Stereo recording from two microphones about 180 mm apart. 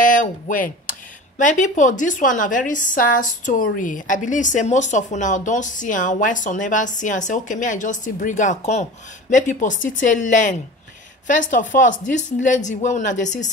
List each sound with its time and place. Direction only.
0.0 s speech: 45° left (ahead or behind)